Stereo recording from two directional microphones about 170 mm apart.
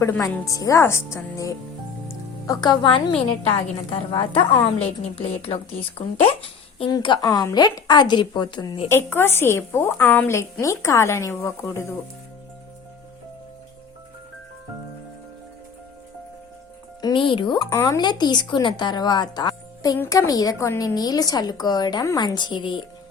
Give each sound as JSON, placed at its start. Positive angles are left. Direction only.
{"t": 0.0, "sound": "a woman's voice", "side_deg": 20}
{"t": 2.0, "sound": "music", "side_deg": 20}
{"t": 4.1, "sound": "a woman's voice", "side_deg": 30}
{"t": 8.9, "sound": "a woman's voice", "side_deg": 15}
{"t": 17.0, "sound": "a woman's voice", "side_deg": 25}
{"t": 17.7, "sound": "a woman's voice", "side_deg": 15}